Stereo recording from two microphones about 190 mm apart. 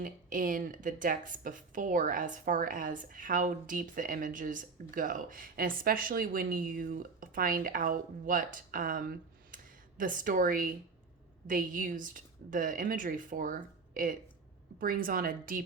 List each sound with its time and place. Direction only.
0.0 s speech: 45° right (ahead or behind)